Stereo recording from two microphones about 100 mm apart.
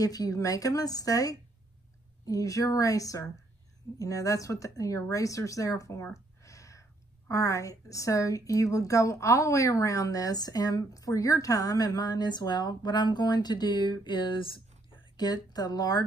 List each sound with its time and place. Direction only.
0.0 s speech: 35° left (ahead or behind); by 15.0 s 60° left (ahead or behind)
15.1 s speech: 40° left (ahead or behind)